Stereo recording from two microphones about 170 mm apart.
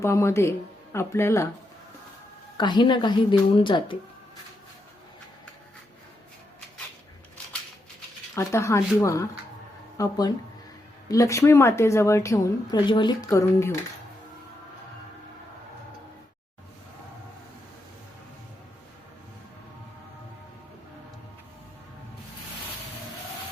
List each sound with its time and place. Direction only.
0.0 s a woman's voice: 15° left (ahead or behind)
2.6 s a woman's voice: 25° left (ahead or behind)
8.4 s a woman's voice: 15° left (ahead or behind)